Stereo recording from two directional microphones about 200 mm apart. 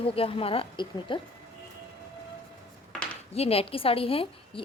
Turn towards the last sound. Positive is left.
turn(degrees=25)  # may be behind; listen again after turning